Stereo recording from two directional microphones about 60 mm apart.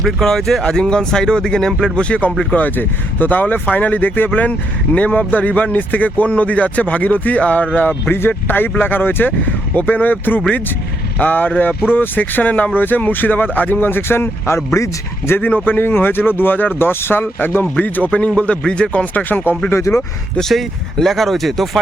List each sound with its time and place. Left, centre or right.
0.0 s speech: centre
2.6 s speech: left
15.3 s speech: left
19.7 s speech: left
20.4 s speech: centre